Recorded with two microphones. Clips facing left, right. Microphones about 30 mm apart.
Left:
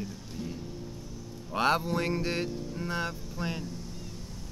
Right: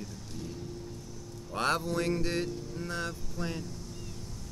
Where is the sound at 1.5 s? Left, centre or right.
Centre.